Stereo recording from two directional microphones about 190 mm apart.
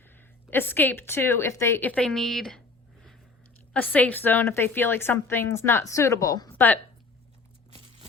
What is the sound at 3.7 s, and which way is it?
A woman's voice, 10° left (ahead or behind).